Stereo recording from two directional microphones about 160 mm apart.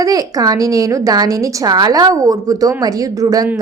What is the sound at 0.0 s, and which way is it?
A woman's voice, 20° right (ahead or behind).